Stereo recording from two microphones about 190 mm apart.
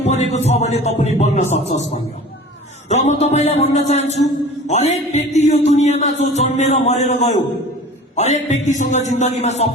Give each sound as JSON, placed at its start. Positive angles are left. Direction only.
{"t": 0.0, "sound": "a man's voice", "side_deg": 35}